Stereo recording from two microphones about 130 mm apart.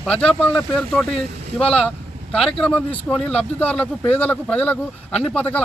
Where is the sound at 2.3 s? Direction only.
5° left (ahead or behind).